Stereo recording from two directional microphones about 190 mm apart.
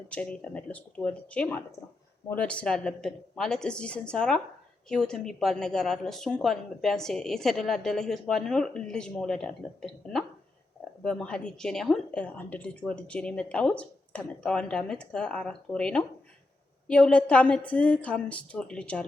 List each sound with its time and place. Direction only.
0.1 s a woman's voice: 5° left (ahead or behind)